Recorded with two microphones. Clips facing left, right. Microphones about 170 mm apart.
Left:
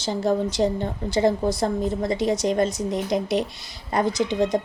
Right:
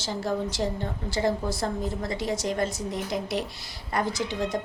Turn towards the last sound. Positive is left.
turn(degrees=20)  # may be behind; listen again after turning